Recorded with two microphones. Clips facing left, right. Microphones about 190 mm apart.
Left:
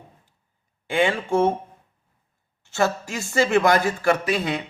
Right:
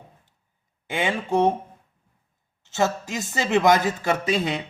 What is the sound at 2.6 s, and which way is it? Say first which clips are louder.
A man's voice: left 1 dB; 20° right (ahead or behind).